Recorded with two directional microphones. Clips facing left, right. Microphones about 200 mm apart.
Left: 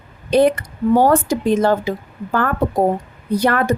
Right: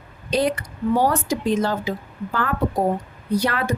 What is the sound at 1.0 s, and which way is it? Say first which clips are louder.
Speech: left 6 dB; 55° left (ahead or behind).